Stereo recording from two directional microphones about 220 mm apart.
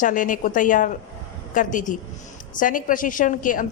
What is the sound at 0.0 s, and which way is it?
Speech, 35° left (ahead or behind).